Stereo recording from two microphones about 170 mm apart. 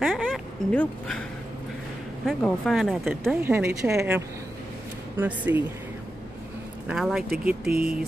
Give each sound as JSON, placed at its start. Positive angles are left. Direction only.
{"t": 0.0, "sound": "a sound", "side_deg": 0}
{"t": 0.7, "sound": "speech", "side_deg": 5}
{"t": 2.2, "sound": "speech", "side_deg": 0}
{"t": 3.3, "sound": "a woman's voice", "side_deg": -15}
{"t": 6.9, "sound": "speech", "side_deg": -5}
{"t": 7.6, "sound": "speech", "side_deg": -60}